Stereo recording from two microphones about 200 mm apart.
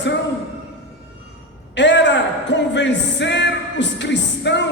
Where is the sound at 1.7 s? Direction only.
60° left (ahead or behind).